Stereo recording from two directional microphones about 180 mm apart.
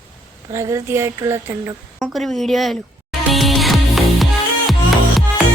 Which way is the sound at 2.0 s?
Centre (ahead or behind).